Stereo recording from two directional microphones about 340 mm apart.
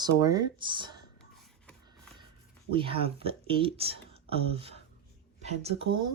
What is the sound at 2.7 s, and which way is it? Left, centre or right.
Speech, centre.